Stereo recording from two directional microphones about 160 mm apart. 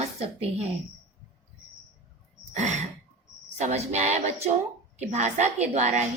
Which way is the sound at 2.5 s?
45° right (ahead or behind).